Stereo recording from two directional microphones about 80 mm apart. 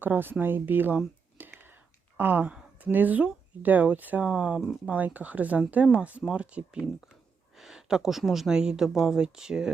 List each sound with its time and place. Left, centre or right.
0.0 s speech: right
1.4 s whispering: right
2.1 s speech: right
7.5 s speech: centre